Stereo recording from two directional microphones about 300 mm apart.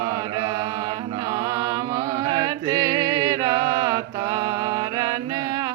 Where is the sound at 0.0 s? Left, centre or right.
Centre.